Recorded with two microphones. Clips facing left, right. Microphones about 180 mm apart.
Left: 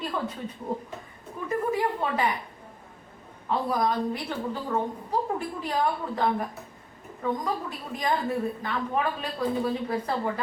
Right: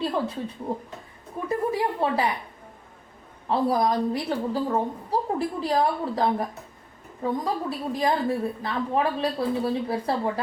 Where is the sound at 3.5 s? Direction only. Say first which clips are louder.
Right 4 dB; 35° right (ahead or behind).